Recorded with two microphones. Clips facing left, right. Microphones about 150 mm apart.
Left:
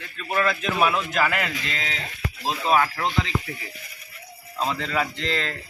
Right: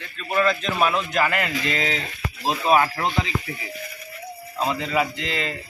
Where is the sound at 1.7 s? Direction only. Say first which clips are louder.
Right 6 dB; 15° right (ahead or behind).